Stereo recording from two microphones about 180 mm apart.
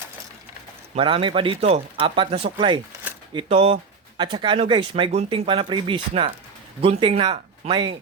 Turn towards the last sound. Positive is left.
turn(degrees=-25)  # may be behind; listen again after turning